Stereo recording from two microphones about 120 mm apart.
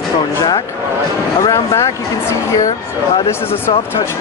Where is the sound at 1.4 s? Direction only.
25° left (ahead or behind).